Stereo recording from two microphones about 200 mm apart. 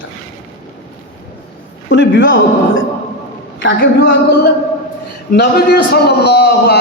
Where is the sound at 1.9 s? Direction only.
65° left (ahead or behind).